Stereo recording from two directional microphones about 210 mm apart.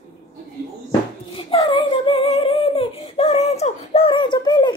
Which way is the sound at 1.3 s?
25° left (ahead or behind).